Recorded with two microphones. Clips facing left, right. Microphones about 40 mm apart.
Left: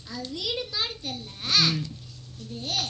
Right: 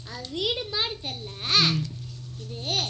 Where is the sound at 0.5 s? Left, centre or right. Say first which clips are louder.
Right 2 dB; right.